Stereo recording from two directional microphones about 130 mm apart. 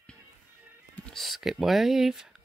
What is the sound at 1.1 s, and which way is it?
Speech, centre (ahead or behind).